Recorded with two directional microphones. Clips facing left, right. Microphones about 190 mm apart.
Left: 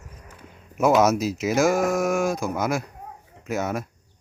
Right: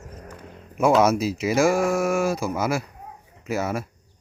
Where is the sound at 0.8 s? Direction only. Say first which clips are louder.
Even; centre (ahead or behind).